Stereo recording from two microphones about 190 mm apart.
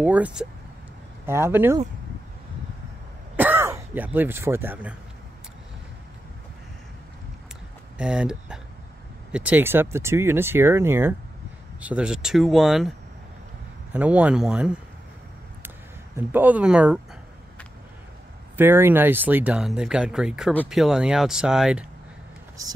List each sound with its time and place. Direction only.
0.0 s speech: 5° right (ahead or behind)
3.3 s speech: 10° right (ahead or behind)
8.0 s speech: 5° right (ahead or behind)
13.9 s speech: 5° right (ahead or behind)
16.3 s speech: 10° right (ahead or behind)
18.6 s speech: 10° right (ahead or behind)